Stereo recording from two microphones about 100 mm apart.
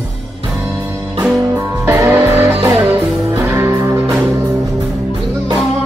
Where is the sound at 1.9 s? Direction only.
25° right (ahead or behind).